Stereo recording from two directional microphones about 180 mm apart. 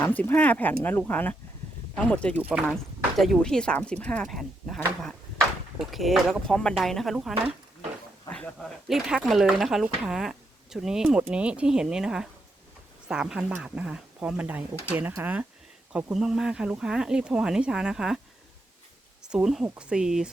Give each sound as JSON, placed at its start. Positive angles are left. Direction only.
{"t": 0.0, "sound": "speech", "side_deg": 10}
{"t": 5.8, "sound": "speech", "side_deg": 0}
{"t": 7.3, "sound": "a sound", "side_deg": -35}
{"t": 8.9, "sound": "speech", "side_deg": 0}
{"t": 19.2, "sound": "speech", "side_deg": -5}